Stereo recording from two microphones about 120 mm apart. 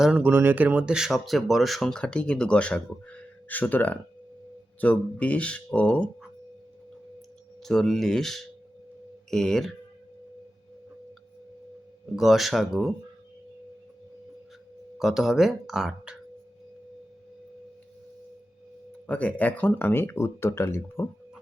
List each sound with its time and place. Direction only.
0.0 s speech: 10° right (ahead or behind); by 6.1 s 10° left (ahead or behind)
7.6 s speech: 5° left (ahead or behind)
12.1 s speech: centre (ahead or behind)
14.9 s speech: centre (ahead or behind)
19.0 s speech: 10° left (ahead or behind)